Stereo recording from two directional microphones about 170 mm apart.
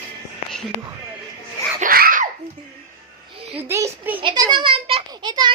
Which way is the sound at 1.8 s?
60° right (ahead or behind).